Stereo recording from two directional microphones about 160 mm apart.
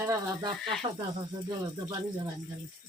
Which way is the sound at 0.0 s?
20° right (ahead or behind).